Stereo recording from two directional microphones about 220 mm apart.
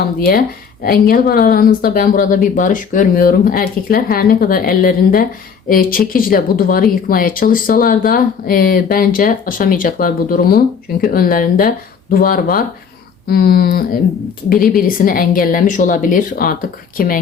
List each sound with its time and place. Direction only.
0.3 s speech: 40° left (ahead or behind)